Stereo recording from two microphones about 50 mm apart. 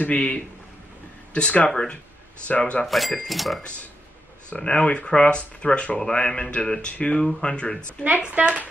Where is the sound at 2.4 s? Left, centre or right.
Left.